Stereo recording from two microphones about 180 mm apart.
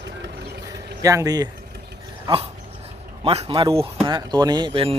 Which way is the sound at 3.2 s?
35° right (ahead or behind).